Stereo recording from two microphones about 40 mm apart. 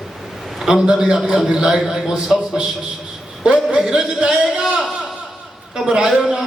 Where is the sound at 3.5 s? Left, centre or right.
Right.